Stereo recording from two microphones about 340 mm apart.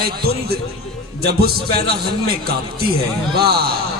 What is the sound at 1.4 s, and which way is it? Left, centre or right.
Speech, right.